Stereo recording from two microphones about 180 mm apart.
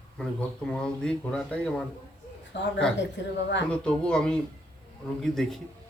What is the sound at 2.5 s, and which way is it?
Speech, 80° left.